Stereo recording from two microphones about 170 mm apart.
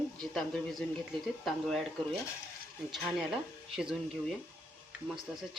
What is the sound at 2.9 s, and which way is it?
A man's voice, centre (ahead or behind).